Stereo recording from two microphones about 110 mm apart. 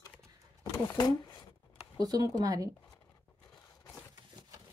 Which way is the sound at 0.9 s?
40° left (ahead or behind).